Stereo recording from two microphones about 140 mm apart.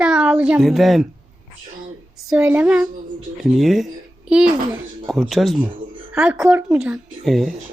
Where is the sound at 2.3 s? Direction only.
5° right (ahead or behind).